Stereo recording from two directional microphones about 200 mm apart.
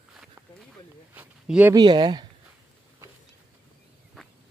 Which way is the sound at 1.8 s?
20° right (ahead or behind).